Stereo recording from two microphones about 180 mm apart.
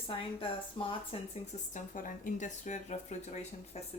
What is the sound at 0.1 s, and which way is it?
A woman's voice, 30° left (ahead or behind).